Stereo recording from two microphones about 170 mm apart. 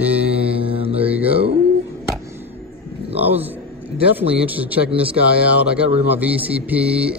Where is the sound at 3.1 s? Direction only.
10° right (ahead or behind).